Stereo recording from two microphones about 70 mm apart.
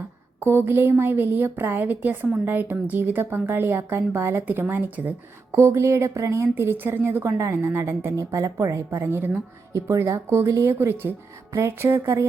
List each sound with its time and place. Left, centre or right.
0.3 s a woman's voice: right
5.5 s speech: right
6.5 s a woman's voice: right
8.1 s speech: right
9.9 s a woman's voice: right